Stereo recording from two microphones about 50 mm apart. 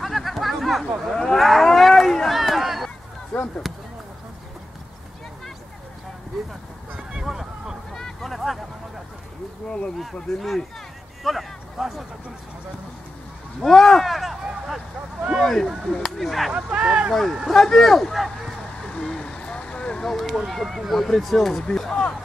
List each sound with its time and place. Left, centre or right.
0.0 s chatter: centre
1.1 s cattle: centre
3.3 s chop: centre
7.0 s a sound: centre
7.9 s a sound: centre
9.7 s speech: centre
10.3 s speech: centre
11.2 s a sound: centre
13.6 s speech: centre
16.5 s speech: centre
17.1 s speech: centre
18.9 s vehicle: centre
20.2 s speech: centre